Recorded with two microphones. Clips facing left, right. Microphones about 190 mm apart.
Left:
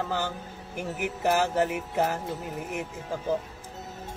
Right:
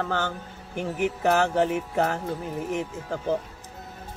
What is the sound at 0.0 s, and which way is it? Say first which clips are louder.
Speech: right 2 dB; 5° left (ahead or behind).